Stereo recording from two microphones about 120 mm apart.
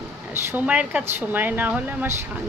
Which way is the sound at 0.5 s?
10° right (ahead or behind).